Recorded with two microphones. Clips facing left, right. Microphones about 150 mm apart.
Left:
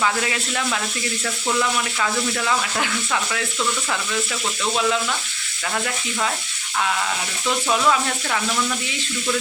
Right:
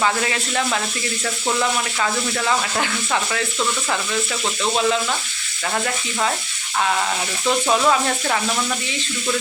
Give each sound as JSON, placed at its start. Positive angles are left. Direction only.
{"t": 1.2, "sound": "speech", "side_deg": -30}
{"t": 4.6, "sound": "speech", "side_deg": -30}
{"t": 7.4, "sound": "speech", "side_deg": -35}